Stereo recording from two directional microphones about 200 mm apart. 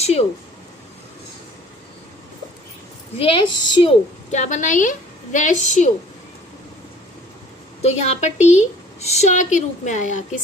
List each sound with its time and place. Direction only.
0.0 s speech: 30° left (ahead or behind)
3.2 s a woman's voice: 25° left (ahead or behind)
7.8 s a woman's voice: 35° left (ahead or behind)